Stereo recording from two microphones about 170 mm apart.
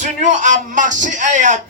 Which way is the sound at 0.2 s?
45° right (ahead or behind).